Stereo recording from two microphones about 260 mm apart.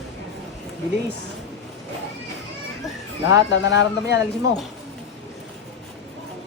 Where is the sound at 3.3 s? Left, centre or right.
Left.